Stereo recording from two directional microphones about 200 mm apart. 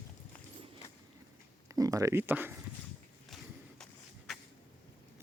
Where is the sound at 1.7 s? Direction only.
15° right (ahead or behind).